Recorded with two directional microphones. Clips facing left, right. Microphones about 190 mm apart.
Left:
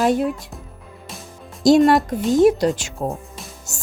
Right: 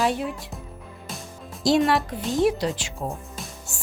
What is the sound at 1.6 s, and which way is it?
Speech, 45° left (ahead or behind).